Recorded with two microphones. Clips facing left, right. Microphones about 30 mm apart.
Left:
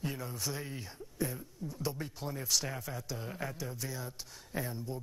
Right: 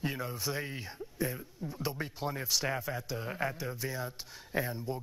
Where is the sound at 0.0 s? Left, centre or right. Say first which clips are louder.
Right 3 dB; right.